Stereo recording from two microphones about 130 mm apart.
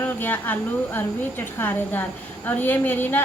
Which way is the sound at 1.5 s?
15° left (ahead or behind).